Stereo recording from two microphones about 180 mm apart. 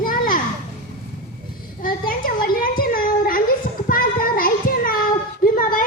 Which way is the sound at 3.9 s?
50° left (ahead or behind).